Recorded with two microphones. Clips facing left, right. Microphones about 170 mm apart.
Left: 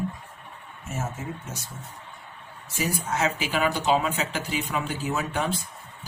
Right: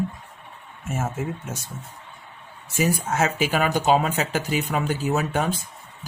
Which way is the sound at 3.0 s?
45° right (ahead or behind).